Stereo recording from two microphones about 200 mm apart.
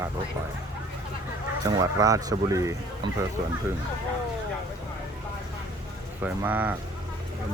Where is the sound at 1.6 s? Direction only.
15° right (ahead or behind).